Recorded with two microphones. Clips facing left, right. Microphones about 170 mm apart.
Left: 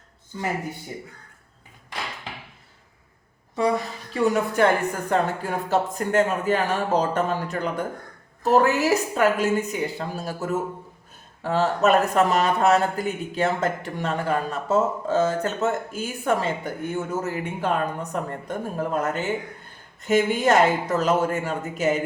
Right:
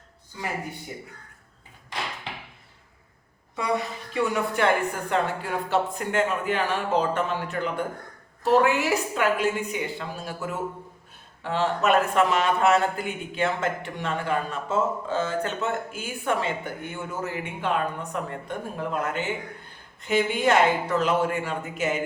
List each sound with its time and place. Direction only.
4.1 s speech: 40° left (ahead or behind)